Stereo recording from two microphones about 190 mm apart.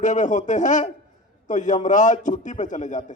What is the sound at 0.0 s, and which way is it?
A man's voice, 40° left (ahead or behind).